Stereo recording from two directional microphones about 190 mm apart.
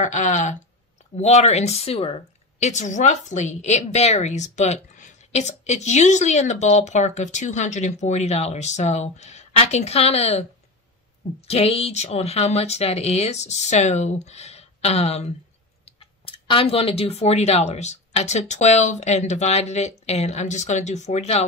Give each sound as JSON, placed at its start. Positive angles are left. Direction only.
{"t": 0.0, "sound": "a woman's voice", "side_deg": 40}
{"t": 11.4, "sound": "a woman's voice", "side_deg": 30}